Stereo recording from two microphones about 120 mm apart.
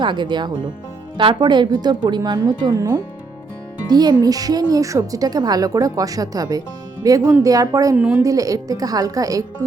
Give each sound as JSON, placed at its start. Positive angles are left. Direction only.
{"t": 0.0, "sound": "speech", "side_deg": -40}
{"t": 7.2, "sound": "a woman's voice", "side_deg": -10}
{"t": 7.4, "sound": "a woman's voice", "side_deg": -30}
{"t": 7.9, "sound": "a woman's voice", "side_deg": -10}
{"t": 8.2, "sound": "a woman's voice", "side_deg": -30}